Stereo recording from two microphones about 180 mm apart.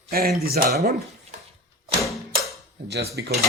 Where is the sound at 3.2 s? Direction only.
75° right (ahead or behind).